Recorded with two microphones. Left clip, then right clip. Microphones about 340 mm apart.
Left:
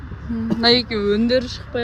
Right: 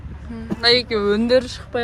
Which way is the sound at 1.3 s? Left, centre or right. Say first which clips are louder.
Right 2 dB; centre.